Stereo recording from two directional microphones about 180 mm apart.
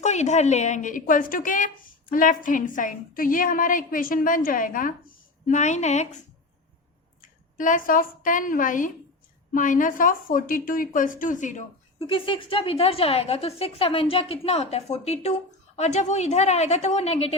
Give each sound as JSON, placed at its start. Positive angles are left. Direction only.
{"t": 0.0, "sound": "a woman's voice", "side_deg": 40}
{"t": 7.2, "sound": "a woman's voice", "side_deg": 45}
{"t": 12.0, "sound": "a woman's voice", "side_deg": 30}